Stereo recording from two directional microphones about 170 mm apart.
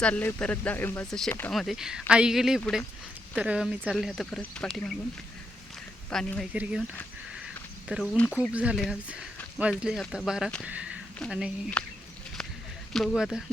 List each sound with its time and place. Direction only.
0.0 s speech: 10° left (ahead or behind)
6.1 s speech: 5° left (ahead or behind)
6.5 s speech: 5° right (ahead or behind)
7.9 s speech: centre (ahead or behind)
11.8 s speech: 5° left (ahead or behind)